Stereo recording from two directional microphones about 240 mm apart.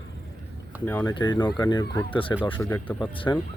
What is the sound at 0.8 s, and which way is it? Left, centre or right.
Speech, centre.